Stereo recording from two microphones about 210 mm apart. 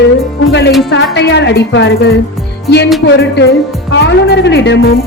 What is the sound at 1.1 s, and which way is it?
Speech, 55° left (ahead or behind).